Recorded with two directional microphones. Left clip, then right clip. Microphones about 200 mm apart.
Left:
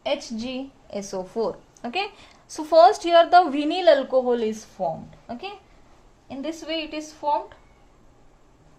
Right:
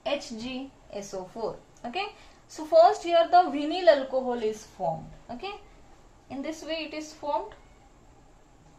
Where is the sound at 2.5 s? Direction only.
60° left (ahead or behind).